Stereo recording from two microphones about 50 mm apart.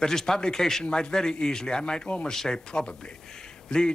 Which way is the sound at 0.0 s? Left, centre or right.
Centre.